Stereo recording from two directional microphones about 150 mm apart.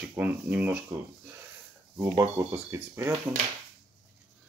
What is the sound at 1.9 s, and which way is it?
Speech, 15° right (ahead or behind).